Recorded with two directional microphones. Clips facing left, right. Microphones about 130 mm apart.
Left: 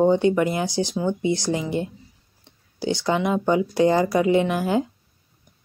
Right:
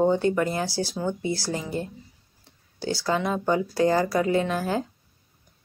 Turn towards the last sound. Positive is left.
turn(degrees=15)  # may be behind; listen again after turning